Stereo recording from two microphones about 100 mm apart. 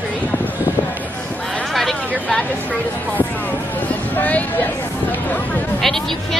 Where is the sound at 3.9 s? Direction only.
15° left (ahead or behind).